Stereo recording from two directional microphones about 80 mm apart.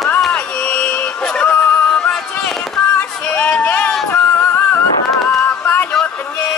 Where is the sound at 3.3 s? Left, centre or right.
Centre.